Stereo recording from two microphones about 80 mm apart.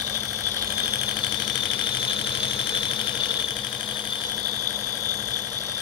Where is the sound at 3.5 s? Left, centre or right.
Left.